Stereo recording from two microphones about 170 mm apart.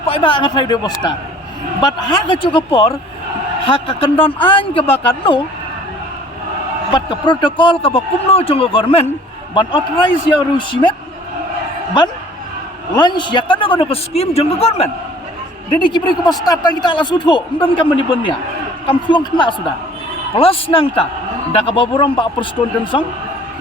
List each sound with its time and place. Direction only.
0.0 s speech: 30° left (ahead or behind)
6.9 s speech: 25° left (ahead or behind)
12.9 s speech: 25° left (ahead or behind)